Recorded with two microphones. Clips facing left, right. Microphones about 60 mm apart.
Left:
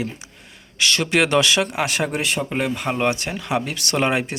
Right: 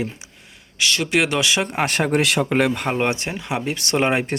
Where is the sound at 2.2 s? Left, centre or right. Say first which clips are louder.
Right 4 dB; right.